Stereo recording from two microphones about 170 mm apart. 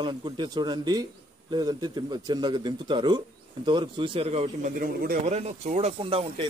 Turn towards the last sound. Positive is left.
turn(degrees=-30)  # may be behind; listen again after turning